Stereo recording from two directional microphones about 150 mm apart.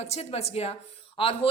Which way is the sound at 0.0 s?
45° left (ahead or behind).